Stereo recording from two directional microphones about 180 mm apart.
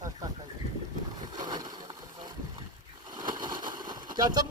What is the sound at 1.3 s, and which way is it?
Boat, 20° right (ahead or behind).